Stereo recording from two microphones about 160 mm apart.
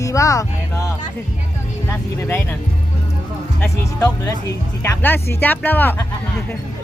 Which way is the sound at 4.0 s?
15° left (ahead or behind).